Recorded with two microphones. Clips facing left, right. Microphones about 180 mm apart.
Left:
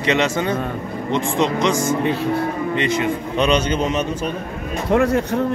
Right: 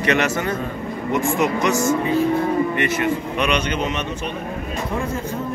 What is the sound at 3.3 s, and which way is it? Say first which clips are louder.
Speech: left 3 dB; 30° left (ahead or behind).